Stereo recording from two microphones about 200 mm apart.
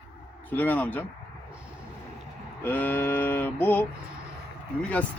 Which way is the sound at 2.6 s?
10° left (ahead or behind).